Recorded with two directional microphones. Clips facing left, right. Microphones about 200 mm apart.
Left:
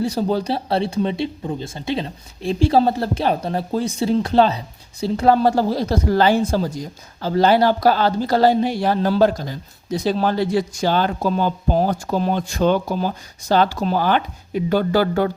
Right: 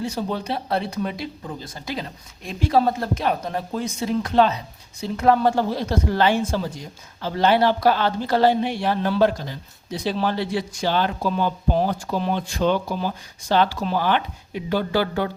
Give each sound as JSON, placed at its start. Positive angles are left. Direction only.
{"t": 0.0, "sound": "speech", "side_deg": 35}